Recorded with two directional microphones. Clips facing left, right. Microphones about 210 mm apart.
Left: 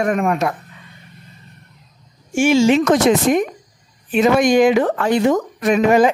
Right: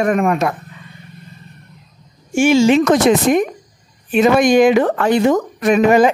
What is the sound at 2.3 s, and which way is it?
A woman's voice, 70° right (ahead or behind).